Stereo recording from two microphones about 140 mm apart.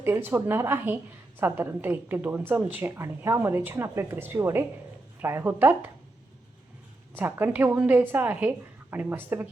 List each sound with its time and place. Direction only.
0.0 s a woman's voice: 15° right (ahead or behind)
7.2 s a woman's voice: 15° right (ahead or behind)